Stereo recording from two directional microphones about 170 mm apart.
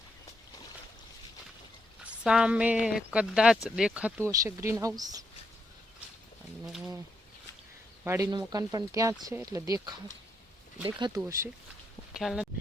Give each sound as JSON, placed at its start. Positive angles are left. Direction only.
{"t": 2.0, "sound": "speech", "side_deg": -5}
{"t": 6.7, "sound": "speech", "side_deg": 0}
{"t": 8.0, "sound": "speech", "side_deg": -15}
{"t": 12.2, "sound": "speech", "side_deg": 0}